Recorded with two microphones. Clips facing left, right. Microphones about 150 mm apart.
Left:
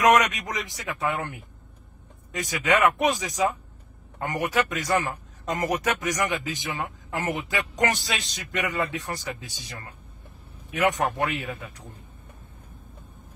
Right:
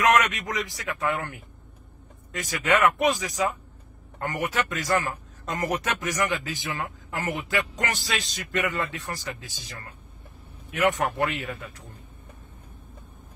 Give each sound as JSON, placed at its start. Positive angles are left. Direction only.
{"t": 0.0, "sound": "a man's voice", "side_deg": 15}